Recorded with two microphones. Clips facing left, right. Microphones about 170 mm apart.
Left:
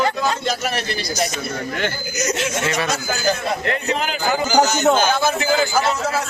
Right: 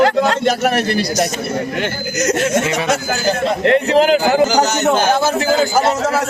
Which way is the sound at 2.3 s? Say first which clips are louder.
Right 8 dB; 55° right (ahead or behind).